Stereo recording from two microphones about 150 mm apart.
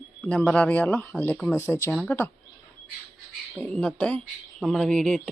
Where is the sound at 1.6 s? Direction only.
20° left (ahead or behind).